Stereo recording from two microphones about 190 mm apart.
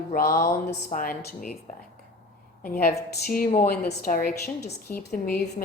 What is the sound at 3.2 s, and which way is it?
A woman's voice, 50° left (ahead or behind).